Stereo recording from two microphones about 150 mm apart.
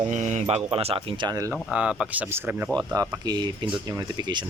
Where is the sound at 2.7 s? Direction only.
25° right (ahead or behind).